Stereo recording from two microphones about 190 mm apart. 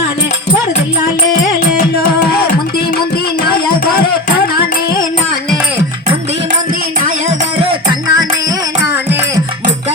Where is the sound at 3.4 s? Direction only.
55° left (ahead or behind).